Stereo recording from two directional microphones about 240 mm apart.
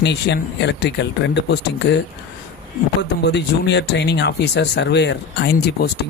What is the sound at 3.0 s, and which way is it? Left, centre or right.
Speech, left.